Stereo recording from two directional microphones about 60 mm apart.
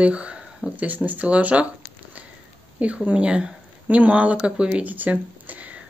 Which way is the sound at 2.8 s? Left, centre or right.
Right.